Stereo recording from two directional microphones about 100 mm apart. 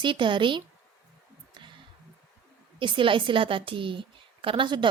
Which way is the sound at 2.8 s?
55° right (ahead or behind).